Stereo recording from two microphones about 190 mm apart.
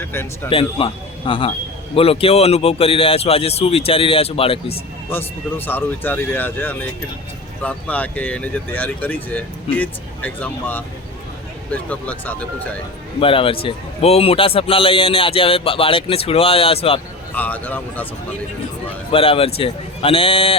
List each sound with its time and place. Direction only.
0.0 s speech: 10° left (ahead or behind)
0.5 s a man's voice: 30° left (ahead or behind)
5.1 s speech: 10° left (ahead or behind)
13.1 s a man's voice: 30° left (ahead or behind)
17.3 s speech: 10° left (ahead or behind)
19.1 s a man's voice: 30° left (ahead or behind)